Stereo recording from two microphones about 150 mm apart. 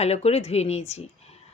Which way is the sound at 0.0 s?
45° left (ahead or behind).